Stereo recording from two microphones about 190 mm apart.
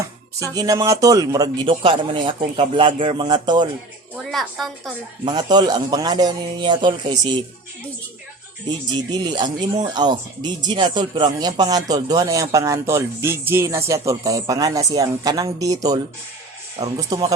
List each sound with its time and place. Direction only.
0.3 s speech: 20° right (ahead or behind)
4.2 s a woman's voice: centre (ahead or behind)
5.2 s speech: 20° right (ahead or behind)
9.0 s speech: 20° right (ahead or behind)
17.1 s speech: 20° right (ahead or behind)